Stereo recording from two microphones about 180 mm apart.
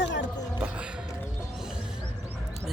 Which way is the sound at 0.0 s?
80° left.